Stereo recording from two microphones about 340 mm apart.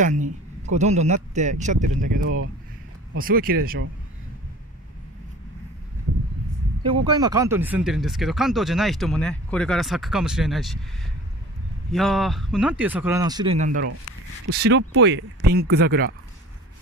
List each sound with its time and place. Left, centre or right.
0.0 s speech: right
7.1 s speech: centre
11.9 s speech: centre
14.6 s speech: right